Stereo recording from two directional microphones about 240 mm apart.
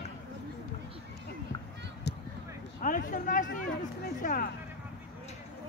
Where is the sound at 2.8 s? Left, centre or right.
Left.